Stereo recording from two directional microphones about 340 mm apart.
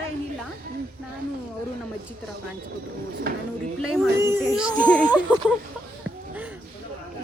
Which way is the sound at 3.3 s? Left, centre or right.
Right.